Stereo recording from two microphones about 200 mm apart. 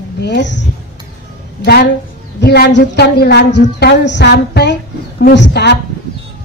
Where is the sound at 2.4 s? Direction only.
55° left (ahead or behind).